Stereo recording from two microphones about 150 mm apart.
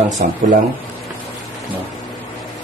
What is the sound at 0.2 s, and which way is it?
Speech, 60° right (ahead or behind).